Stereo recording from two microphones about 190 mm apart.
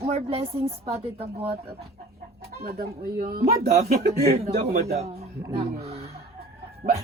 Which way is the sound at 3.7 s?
35° right (ahead or behind).